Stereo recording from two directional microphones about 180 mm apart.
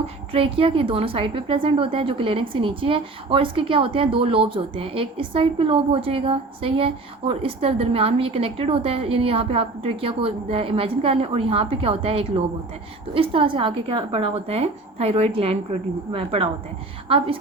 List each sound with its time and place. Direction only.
0.3 s a woman's voice: 30° right (ahead or behind)